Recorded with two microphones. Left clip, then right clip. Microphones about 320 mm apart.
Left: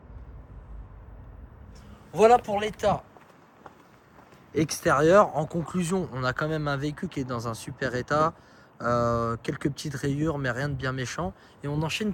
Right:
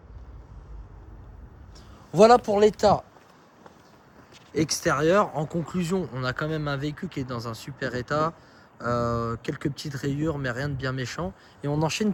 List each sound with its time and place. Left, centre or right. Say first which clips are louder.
2.1 s speech: right 3 dB; centre
4.5 s speech: left 1 dB; centre